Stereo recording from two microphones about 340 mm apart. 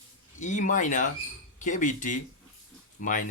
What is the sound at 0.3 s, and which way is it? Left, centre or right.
Speech, left.